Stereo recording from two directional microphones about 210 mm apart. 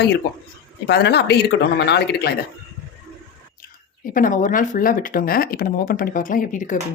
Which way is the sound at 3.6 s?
40° left (ahead or behind).